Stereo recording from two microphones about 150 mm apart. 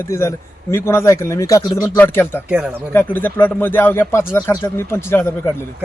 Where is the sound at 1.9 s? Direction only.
10° left (ahead or behind).